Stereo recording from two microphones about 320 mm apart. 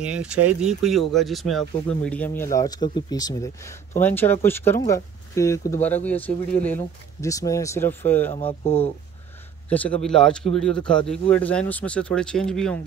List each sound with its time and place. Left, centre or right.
0.0 s speech: centre
8.3 s speech: centre
9.7 s speech: centre